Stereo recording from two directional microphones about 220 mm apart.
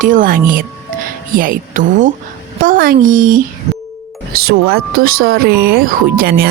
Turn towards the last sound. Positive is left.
turn(degrees=-40)  # may be behind; listen again after turning